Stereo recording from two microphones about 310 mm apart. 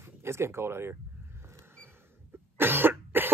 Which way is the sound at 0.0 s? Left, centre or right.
Centre.